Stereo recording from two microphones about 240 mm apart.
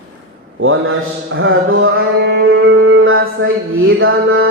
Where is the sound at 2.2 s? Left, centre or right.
Right.